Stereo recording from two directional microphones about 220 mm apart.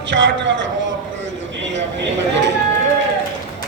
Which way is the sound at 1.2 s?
55° right (ahead or behind).